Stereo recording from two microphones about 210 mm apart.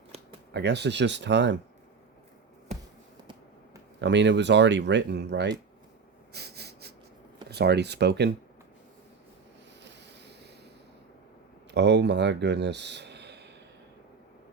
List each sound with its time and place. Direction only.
0.5 s speech: 55° right (ahead or behind)
4.0 s speech: 55° right (ahead or behind)
6.3 s a sound: 50° right (ahead or behind)
7.5 s speech: 50° right (ahead or behind)
9.8 s a sound: 55° right (ahead or behind)
11.7 s speech: 55° right (ahead or behind)